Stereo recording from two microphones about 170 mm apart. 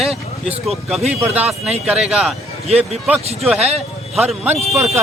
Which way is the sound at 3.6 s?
40° right (ahead or behind).